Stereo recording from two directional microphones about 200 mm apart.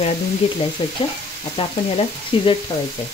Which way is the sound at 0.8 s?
25° left (ahead or behind).